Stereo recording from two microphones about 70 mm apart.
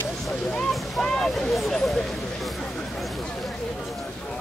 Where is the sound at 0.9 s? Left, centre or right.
Centre.